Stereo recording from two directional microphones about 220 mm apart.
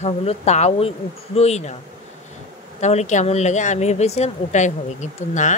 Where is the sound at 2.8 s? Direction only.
30° left (ahead or behind).